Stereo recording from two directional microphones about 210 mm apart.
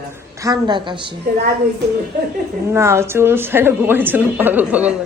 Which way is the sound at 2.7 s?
10° right (ahead or behind).